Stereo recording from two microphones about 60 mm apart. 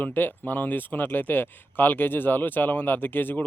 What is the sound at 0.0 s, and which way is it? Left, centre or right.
Speech, left.